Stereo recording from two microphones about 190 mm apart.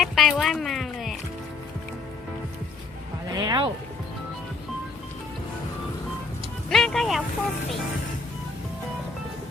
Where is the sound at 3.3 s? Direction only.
20° right (ahead or behind).